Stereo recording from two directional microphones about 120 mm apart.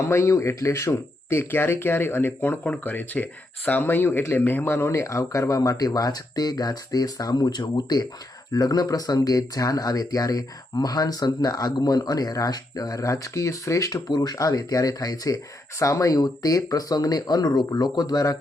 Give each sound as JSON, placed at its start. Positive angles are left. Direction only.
{"t": 0.1, "sound": "speech", "side_deg": 25}